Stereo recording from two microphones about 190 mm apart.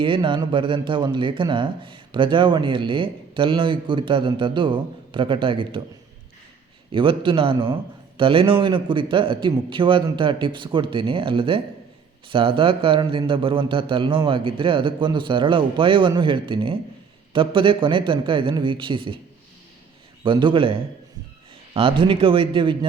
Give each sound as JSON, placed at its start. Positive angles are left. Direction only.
{"t": 0.0, "sound": "speech", "side_deg": -25}
{"t": 6.9, "sound": "speech", "side_deg": -25}
{"t": 20.2, "sound": "speech", "side_deg": -25}